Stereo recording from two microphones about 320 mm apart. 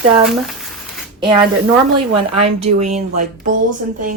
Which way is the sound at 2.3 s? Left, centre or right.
Centre.